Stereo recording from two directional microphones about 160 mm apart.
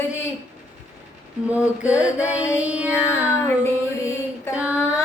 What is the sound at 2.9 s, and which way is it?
Music, 15° left (ahead or behind).